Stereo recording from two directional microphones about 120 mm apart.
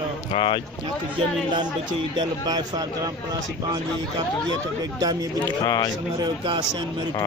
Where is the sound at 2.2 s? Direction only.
35° right (ahead or behind).